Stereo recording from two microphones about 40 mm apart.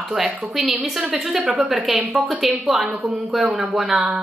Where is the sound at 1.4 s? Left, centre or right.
Right.